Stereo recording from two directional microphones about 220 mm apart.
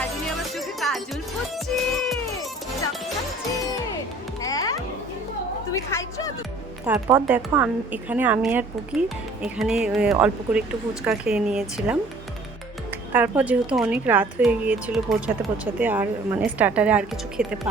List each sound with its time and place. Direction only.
0.5 s music: centre (ahead or behind)
4.4 s music: 15° left (ahead or behind)
5.7 s a sound: 15° left (ahead or behind)
6.8 s a woman's voice: 10° right (ahead or behind)
13.1 s a woman's voice: 5° right (ahead or behind)